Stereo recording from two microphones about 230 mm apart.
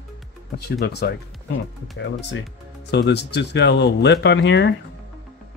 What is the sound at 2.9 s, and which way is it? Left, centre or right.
Speech, left.